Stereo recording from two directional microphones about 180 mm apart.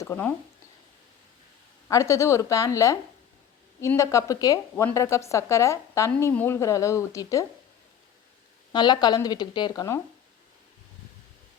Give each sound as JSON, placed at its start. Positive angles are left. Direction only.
{"t": 0.0, "sound": "speech", "side_deg": 10}
{"t": 1.9, "sound": "a woman's voice", "side_deg": 15}
{"t": 8.7, "sound": "a woman's voice", "side_deg": 25}